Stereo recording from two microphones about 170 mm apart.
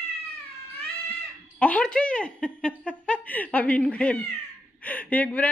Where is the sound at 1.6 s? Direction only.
5° left (ahead or behind).